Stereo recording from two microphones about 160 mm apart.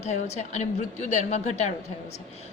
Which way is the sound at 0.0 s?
45° left (ahead or behind).